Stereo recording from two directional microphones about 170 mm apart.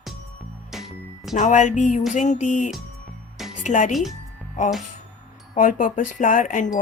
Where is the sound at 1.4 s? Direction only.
45° left (ahead or behind).